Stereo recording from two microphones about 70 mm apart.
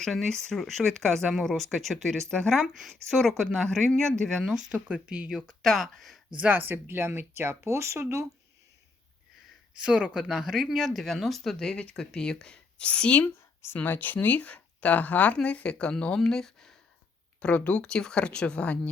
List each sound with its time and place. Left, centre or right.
0.0 s speech: centre
5.0 s speech: centre
6.3 s speech: right
9.7 s speech: centre
11.7 s speech: centre
17.4 s speech: centre